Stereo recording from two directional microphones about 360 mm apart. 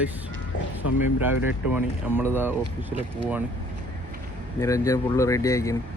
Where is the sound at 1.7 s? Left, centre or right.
Centre.